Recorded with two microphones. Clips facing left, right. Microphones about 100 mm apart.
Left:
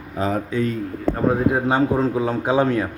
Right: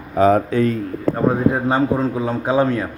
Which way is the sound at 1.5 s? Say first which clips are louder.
Right 1 dB; 15° left (ahead or behind).